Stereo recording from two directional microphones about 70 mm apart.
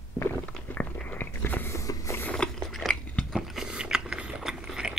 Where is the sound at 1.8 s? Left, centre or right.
Left.